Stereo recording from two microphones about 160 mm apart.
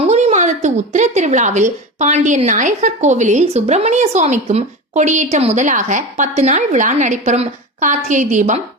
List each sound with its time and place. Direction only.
0.0 s speech: 45° right (ahead or behind)